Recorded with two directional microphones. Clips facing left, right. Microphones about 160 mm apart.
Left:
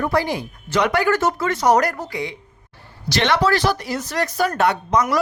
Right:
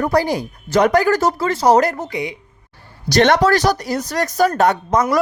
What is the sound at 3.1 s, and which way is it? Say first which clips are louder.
Speech: right 5 dB; 45° right (ahead or behind).